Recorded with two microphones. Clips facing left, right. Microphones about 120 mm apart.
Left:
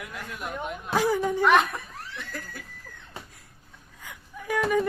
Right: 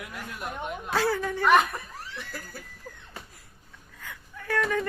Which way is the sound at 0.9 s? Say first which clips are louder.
Left 3 dB; 15° left (ahead or behind).